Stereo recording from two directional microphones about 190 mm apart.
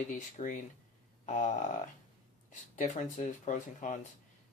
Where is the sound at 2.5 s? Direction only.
40° left (ahead or behind).